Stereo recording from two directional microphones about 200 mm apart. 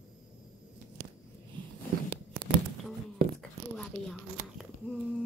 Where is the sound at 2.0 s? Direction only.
50° right (ahead or behind).